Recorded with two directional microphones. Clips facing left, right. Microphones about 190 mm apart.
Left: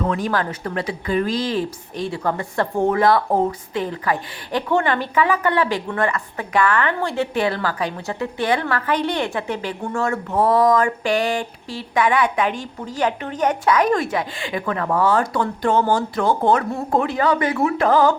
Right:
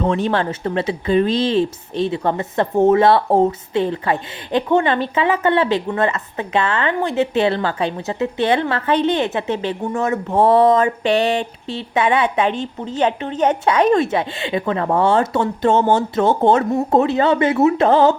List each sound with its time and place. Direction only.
0.0 s speech: 25° right (ahead or behind)